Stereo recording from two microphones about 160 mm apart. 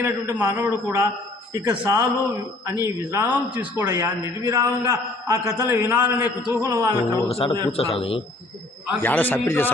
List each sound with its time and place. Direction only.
0.0 s a man's voice: 15° right (ahead or behind)
6.5 s music: 20° right (ahead or behind)
7.3 s a man's voice: 35° left (ahead or behind)
9.0 s a man's voice: 10° left (ahead or behind)